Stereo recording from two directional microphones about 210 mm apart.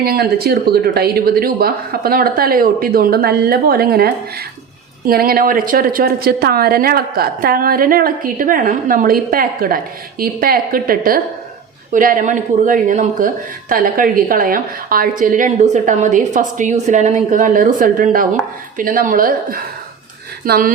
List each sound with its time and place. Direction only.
0.0 s a woman's voice: 45° right (ahead or behind)